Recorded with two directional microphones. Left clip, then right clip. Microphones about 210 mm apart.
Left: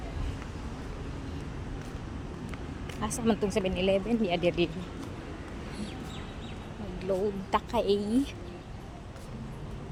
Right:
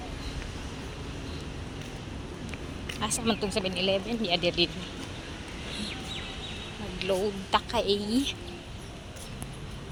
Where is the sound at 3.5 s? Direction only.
25° left (ahead or behind).